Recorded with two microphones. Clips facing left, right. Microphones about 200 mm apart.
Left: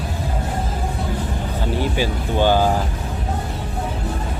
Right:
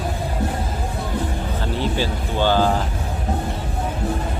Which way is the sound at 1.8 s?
15° left (ahead or behind).